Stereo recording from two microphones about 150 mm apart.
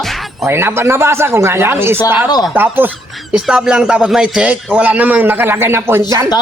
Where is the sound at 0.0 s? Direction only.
Centre (ahead or behind).